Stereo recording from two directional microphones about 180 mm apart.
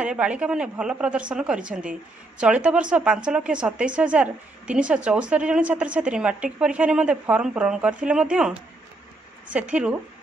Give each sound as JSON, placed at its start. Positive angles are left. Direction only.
{"t": 0.0, "sound": "a woman's voice", "side_deg": -5}